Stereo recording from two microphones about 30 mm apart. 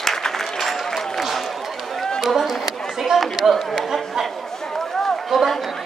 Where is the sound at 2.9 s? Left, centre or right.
Centre.